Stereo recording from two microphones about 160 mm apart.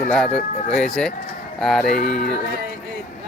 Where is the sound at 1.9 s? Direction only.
70° left (ahead or behind).